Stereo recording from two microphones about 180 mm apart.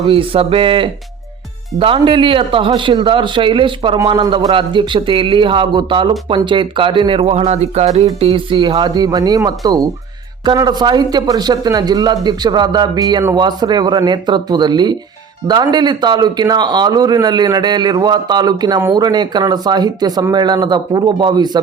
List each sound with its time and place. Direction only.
0.0 s speech: 30° right (ahead or behind)